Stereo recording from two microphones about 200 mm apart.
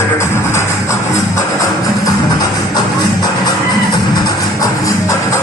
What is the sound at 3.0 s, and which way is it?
Music, 20° left (ahead or behind).